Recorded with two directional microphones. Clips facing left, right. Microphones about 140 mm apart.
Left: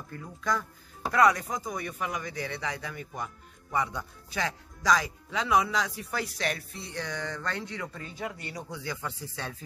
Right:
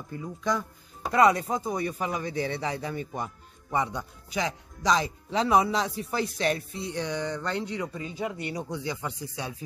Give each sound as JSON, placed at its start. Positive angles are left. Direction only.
{"t": 0.1, "sound": "speech", "side_deg": -15}